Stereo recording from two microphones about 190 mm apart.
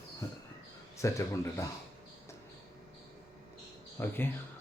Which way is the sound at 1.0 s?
15° left (ahead or behind).